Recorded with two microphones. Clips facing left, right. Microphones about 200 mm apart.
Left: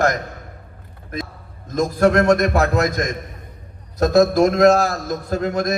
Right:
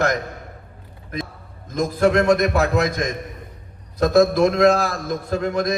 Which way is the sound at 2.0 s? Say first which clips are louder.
Left 1 dB; 50° left (ahead or behind).